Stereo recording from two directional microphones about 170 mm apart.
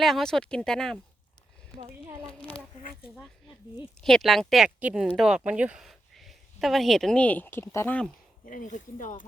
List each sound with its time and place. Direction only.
0.0 s speech: centre (ahead or behind)
4.0 s a woman's voice: centre (ahead or behind)
8.4 s speech: 50° left (ahead or behind)